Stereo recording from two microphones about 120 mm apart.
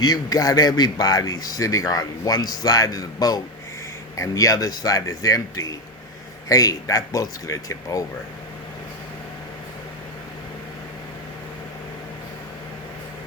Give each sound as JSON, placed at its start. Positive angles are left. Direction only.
{"t": 0.0, "sound": "speech", "side_deg": 30}